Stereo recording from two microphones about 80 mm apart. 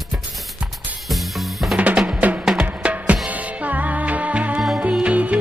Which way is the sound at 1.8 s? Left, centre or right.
Centre.